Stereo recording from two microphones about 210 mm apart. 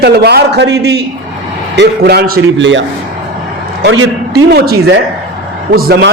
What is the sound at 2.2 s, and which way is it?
Speech, 75° right (ahead or behind).